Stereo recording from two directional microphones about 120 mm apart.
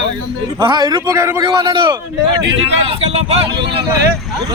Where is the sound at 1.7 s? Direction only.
40° right (ahead or behind).